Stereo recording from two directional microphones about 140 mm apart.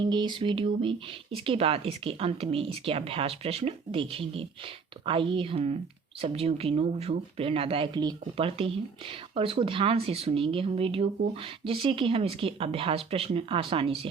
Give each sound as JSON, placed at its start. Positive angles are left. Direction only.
{"t": 0.0, "sound": "speech", "side_deg": -35}